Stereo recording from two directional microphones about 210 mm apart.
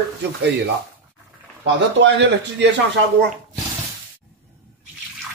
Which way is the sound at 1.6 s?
60° right (ahead or behind).